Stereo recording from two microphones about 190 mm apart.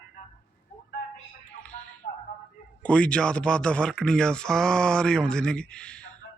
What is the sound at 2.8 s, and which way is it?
A man's voice, 5° left (ahead or behind).